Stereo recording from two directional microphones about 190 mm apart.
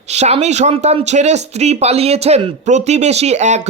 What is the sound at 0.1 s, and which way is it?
Speech, 35° right (ahead or behind).